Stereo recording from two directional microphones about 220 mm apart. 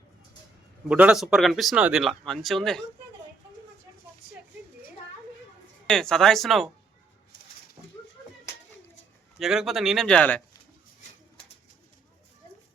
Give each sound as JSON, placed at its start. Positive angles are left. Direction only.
{"t": 0.9, "sound": "speech", "side_deg": -5}
{"t": 5.9, "sound": "speech", "side_deg": 0}
{"t": 7.8, "sound": "horse", "side_deg": -25}
{"t": 9.4, "sound": "speech", "side_deg": 0}